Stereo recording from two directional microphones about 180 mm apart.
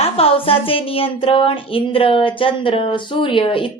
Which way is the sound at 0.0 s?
30° left (ahead or behind).